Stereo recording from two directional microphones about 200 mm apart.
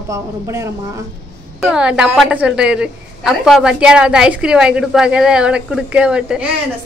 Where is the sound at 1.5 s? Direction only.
5° right (ahead or behind).